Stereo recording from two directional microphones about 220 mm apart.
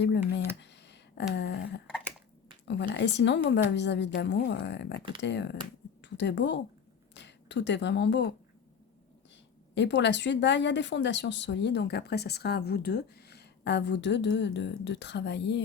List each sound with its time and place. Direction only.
0.0 s speech: 50° left (ahead or behind)
0.6 s a sound: 50° left (ahead or behind)
2.6 s a woman's voice: 55° left (ahead or behind)
9.7 s speech: 55° left (ahead or behind)